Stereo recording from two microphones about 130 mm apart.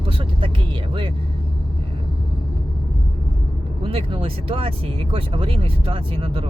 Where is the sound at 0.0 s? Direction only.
45° right (ahead or behind).